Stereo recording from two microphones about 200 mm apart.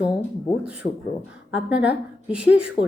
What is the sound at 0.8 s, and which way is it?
Speech, 45° left (ahead or behind).